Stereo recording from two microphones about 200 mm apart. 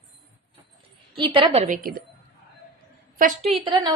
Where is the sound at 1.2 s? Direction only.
25° right (ahead or behind).